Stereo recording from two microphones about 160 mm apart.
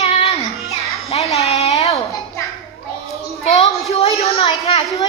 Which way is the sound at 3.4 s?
45° left (ahead or behind).